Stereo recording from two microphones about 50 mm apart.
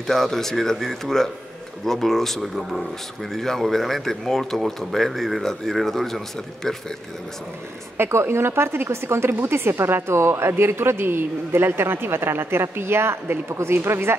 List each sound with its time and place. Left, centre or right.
0.0 s speech: centre
8.0 s a man's voice: right